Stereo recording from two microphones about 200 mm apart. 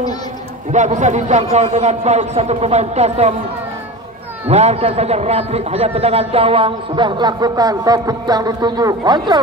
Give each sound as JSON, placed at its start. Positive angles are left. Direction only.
{"t": 0.7, "sound": "a man's voice", "side_deg": -35}
{"t": 4.5, "sound": "a man's voice", "side_deg": -30}